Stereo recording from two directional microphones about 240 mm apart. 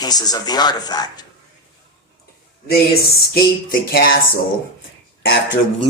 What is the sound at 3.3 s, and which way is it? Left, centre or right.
Speech, left.